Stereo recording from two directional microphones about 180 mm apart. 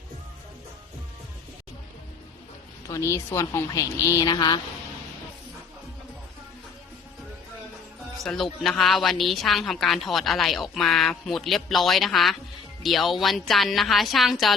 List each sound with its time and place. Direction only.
2.9 s speech: 15° left (ahead or behind)
4.0 s a sound: 20° left (ahead or behind)
8.2 s a woman's voice: centre (ahead or behind)